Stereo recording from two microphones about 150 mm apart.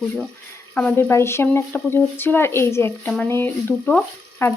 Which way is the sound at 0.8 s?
10° left (ahead or behind).